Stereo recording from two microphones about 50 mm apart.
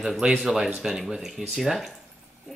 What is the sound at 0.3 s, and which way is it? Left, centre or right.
Speech, centre.